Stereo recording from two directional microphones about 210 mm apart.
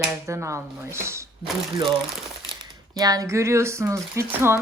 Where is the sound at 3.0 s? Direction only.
15° right (ahead or behind).